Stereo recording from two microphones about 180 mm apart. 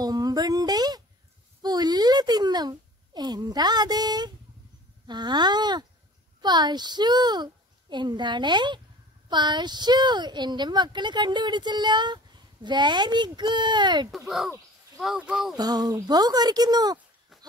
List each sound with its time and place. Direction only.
0.0 s a sound: 20° right (ahead or behind)
5.0 s speech: 25° right (ahead or behind)
14.1 s speech: centre (ahead or behind)
15.5 s speech: 20° right (ahead or behind)
17.3 s goat: centre (ahead or behind)